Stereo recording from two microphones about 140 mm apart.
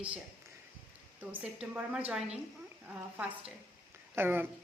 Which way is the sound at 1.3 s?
10° right (ahead or behind).